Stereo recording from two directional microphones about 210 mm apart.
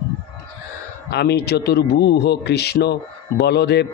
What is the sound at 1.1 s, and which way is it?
A man's voice, 50° left (ahead or behind).